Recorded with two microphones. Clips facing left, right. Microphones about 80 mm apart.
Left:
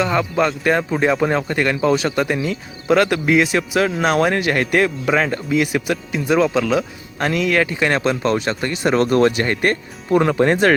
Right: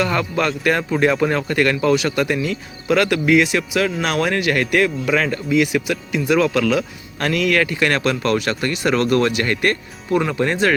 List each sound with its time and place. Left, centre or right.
0.0 s speech: centre
5.5 s speech: left